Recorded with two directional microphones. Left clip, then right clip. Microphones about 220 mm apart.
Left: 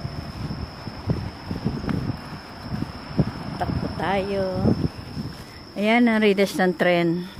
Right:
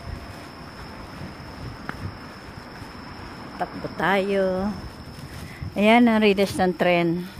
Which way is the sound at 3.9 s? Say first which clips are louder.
Right 3 dB; 25° right (ahead or behind).